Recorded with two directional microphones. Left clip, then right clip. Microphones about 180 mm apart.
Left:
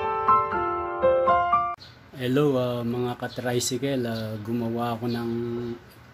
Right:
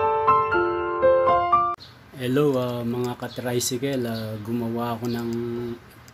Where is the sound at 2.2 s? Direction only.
5° left (ahead or behind).